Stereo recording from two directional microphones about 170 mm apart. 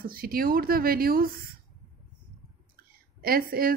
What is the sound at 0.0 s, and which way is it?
Speech, 60° right (ahead or behind).